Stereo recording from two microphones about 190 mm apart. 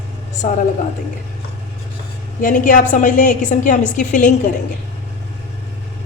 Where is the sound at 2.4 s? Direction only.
45° left (ahead or behind).